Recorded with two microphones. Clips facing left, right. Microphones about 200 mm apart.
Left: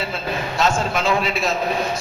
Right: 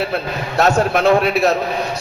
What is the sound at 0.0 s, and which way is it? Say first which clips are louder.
A man's voice: right 4 dB; 65° right (ahead or behind).